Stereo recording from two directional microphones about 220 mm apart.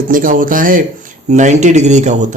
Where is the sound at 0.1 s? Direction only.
40° right (ahead or behind).